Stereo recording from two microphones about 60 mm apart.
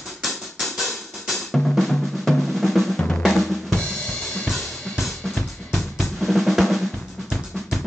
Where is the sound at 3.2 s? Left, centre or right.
Centre.